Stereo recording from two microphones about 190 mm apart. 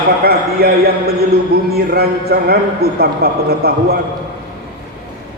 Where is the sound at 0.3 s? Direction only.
55° right (ahead or behind).